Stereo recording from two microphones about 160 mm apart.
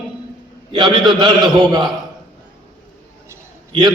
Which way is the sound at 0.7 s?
30° right (ahead or behind).